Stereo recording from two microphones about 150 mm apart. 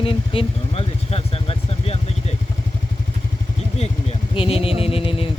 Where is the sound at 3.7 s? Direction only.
45° left (ahead or behind).